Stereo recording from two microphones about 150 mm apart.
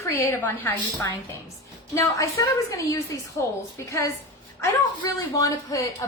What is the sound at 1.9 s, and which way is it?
A woman's voice, 20° left (ahead or behind).